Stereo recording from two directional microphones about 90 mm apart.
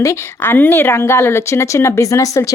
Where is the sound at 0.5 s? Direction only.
25° left (ahead or behind).